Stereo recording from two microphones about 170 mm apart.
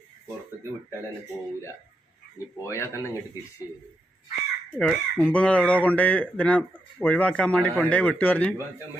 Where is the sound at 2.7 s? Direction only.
15° left (ahead or behind).